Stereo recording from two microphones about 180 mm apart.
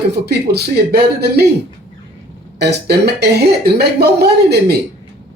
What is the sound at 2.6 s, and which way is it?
Speech, 65° right (ahead or behind).